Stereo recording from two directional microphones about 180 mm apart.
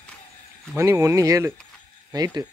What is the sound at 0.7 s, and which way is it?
Speech, 15° right (ahead or behind).